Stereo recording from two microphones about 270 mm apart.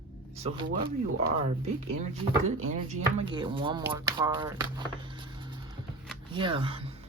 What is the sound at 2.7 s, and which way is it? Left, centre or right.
Speech, right.